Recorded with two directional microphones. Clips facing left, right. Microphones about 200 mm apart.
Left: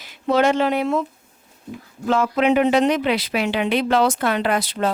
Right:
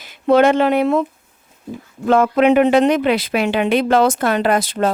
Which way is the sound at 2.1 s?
55° right (ahead or behind).